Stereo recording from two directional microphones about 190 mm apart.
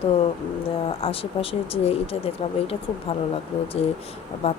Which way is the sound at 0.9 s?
30° left (ahead or behind).